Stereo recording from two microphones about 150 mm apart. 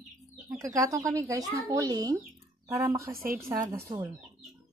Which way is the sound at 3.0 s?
75° right (ahead or behind).